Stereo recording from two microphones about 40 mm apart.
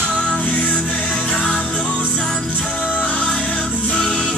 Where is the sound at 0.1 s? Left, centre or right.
Left.